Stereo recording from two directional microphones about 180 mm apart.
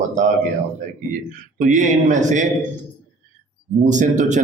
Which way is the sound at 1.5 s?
45° right (ahead or behind).